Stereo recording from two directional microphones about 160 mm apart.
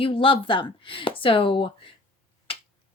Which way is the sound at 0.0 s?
35° left (ahead or behind).